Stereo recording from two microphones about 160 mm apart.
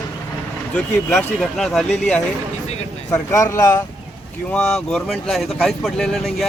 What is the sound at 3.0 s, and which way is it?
Speech, 20° left (ahead or behind).